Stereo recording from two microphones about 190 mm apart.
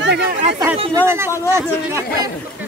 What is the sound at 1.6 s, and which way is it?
Speech, 15° right (ahead or behind).